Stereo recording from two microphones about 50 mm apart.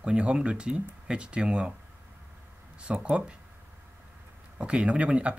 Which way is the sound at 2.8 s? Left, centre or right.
Right.